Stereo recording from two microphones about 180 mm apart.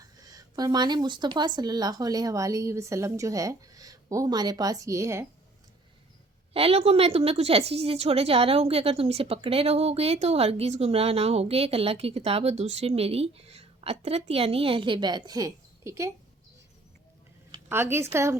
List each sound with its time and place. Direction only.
0.3 s speech: 20° right (ahead or behind)
6.5 s a woman's voice: 30° right (ahead or behind); by 16.1 s 15° right (ahead or behind)
17.7 s a woman's voice: 15° right (ahead or behind)